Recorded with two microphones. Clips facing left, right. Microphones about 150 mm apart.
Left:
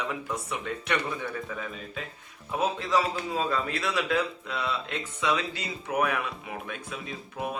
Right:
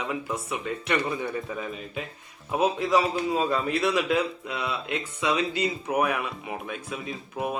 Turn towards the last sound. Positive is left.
turn(degrees=-10)  # may be behind; listen again after turning